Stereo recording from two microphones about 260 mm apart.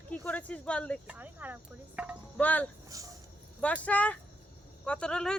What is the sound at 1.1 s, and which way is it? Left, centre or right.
Speech, centre.